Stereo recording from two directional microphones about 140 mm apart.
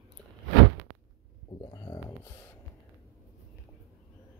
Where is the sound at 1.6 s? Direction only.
30° left (ahead or behind).